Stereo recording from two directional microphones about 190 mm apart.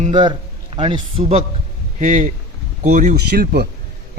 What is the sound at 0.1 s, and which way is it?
A man's voice, 25° right (ahead or behind).